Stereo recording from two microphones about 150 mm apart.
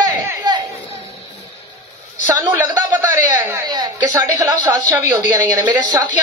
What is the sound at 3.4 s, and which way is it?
A woman's voice, 25° right (ahead or behind).